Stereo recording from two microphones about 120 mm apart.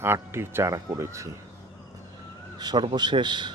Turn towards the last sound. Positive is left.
turn(degrees=-40)  # may be behind; listen again after turning